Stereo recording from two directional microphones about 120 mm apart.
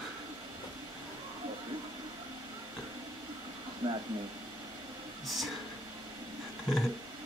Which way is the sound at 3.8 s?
35° right (ahead or behind).